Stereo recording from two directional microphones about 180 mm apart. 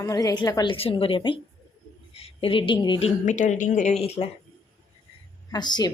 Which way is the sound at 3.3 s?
45° left (ahead or behind).